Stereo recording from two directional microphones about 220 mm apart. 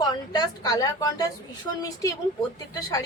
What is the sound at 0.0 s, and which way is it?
A woman's voice, 20° left (ahead or behind).